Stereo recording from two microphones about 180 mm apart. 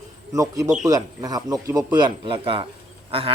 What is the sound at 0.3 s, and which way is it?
A man's voice, 20° right (ahead or behind).